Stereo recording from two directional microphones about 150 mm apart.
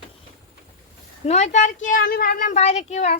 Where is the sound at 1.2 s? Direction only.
45° left (ahead or behind); by 2.6 s 65° left (ahead or behind).